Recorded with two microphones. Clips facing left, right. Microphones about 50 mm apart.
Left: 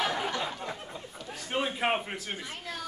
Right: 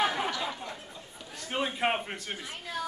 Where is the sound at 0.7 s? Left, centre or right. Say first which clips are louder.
Left 3 dB; left.